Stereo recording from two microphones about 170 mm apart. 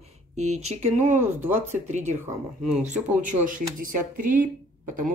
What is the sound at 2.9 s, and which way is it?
Speech, 50° right (ahead or behind).